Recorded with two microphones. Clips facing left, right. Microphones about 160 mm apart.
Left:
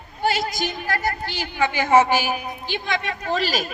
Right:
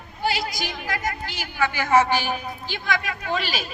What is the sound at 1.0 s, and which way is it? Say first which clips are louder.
A woman's voice: left 3 dB; 30° left (ahead or behind).